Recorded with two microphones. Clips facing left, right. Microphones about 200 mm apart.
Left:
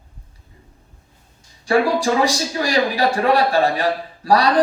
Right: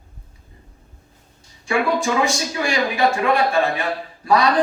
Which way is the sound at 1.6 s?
35° left (ahead or behind).